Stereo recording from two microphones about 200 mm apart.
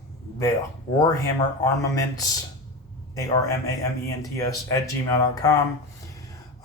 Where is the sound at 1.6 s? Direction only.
15° left (ahead or behind).